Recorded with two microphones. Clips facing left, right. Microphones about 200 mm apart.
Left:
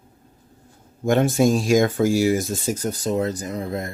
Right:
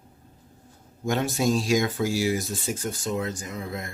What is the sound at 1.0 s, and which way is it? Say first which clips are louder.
Speech: left 7 dB; 50° left (ahead or behind).